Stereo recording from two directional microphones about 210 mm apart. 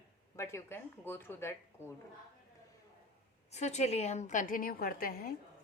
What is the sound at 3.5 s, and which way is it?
A woman's voice, 30° left (ahead or behind).